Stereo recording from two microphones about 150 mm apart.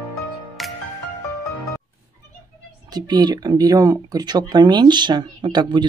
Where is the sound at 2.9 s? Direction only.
30° right (ahead or behind).